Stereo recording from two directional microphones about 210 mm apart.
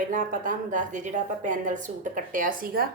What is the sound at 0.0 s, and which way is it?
A woman's voice, 40° right (ahead or behind).